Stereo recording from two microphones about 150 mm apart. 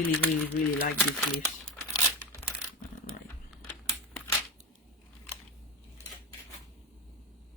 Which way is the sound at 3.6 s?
15° left (ahead or behind).